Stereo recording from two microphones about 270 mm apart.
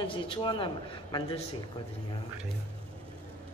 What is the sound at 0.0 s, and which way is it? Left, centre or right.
Speech, centre.